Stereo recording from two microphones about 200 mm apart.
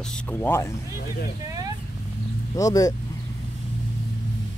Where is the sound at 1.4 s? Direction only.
20° right (ahead or behind).